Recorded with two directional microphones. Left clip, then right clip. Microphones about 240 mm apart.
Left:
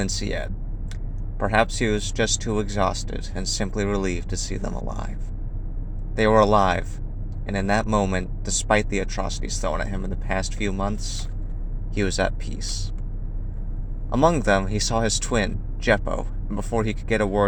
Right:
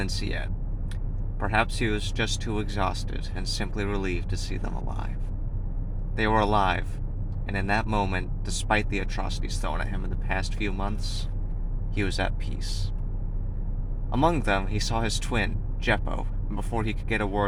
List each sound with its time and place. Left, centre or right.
0.0 s speech: centre
6.1 s speech: centre
14.1 s speech: centre